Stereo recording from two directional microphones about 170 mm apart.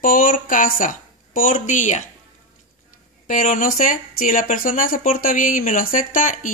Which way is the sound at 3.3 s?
50° left (ahead or behind).